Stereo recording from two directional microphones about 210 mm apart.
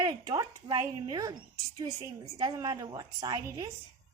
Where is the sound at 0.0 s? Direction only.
20° right (ahead or behind).